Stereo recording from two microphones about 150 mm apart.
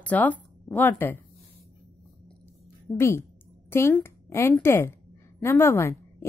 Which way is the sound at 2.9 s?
15° left (ahead or behind).